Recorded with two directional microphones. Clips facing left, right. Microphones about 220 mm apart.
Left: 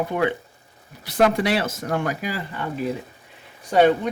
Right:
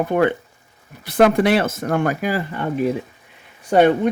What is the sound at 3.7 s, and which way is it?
Speech, 50° right (ahead or behind).